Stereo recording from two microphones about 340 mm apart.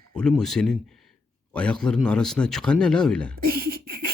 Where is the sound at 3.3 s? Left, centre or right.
Right.